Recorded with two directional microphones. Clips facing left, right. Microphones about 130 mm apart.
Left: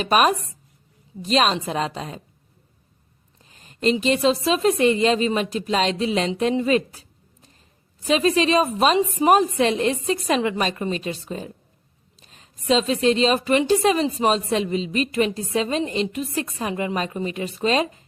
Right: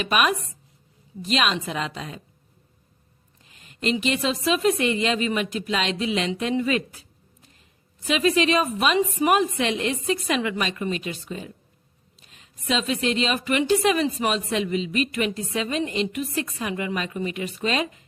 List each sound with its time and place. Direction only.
0.0 s speech: 35° left (ahead or behind)
3.5 s speech: 35° left (ahead or behind)